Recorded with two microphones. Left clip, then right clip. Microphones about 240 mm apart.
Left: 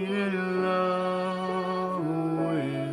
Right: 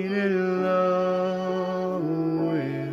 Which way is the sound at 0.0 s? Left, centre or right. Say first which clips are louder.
Right 4 dB; centre.